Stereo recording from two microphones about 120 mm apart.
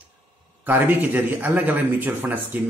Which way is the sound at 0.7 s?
15° right (ahead or behind).